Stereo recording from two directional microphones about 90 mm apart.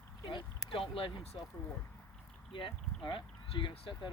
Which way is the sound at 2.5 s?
70° left (ahead or behind).